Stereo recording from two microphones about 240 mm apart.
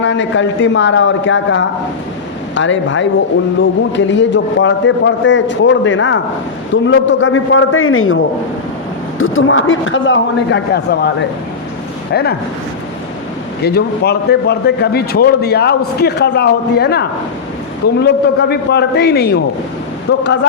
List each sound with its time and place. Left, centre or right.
0.0 s a man's voice: left
13.6 s a man's voice: left